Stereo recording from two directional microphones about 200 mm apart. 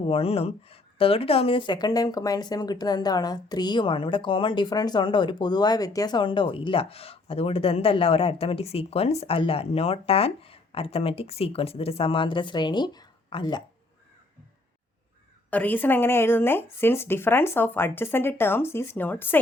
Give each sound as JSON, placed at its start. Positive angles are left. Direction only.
{"t": 0.0, "sound": "speech", "side_deg": 30}
{"t": 15.4, "sound": "speech", "side_deg": 10}